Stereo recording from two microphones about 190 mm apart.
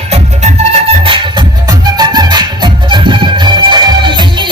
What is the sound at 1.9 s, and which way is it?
Music, 20° right (ahead or behind).